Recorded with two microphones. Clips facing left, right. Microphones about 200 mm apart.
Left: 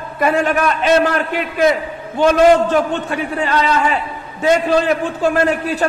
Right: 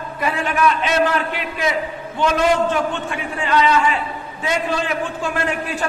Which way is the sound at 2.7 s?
40° left (ahead or behind).